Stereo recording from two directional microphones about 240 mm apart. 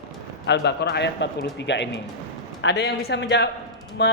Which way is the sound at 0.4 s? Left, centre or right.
Left.